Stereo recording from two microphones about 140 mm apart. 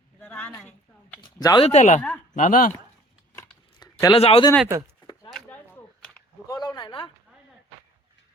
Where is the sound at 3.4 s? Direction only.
30° left (ahead or behind).